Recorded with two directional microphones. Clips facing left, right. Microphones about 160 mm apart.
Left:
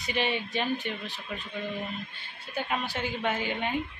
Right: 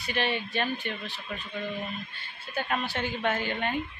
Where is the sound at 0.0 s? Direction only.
15° left (ahead or behind).